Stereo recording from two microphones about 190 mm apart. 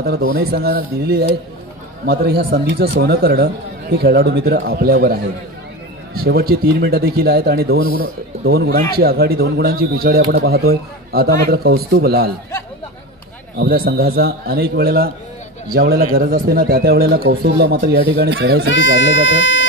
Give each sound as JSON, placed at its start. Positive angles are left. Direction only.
{"t": 0.3, "sound": "a man's voice", "side_deg": -55}
{"t": 13.6, "sound": "a man's voice", "side_deg": -55}
{"t": 18.9, "sound": "speech", "side_deg": 75}